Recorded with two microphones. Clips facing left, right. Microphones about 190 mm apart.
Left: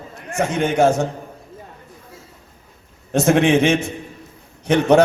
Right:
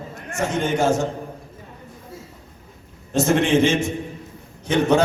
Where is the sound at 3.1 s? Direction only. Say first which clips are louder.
Left 3 dB; 60° left (ahead or behind).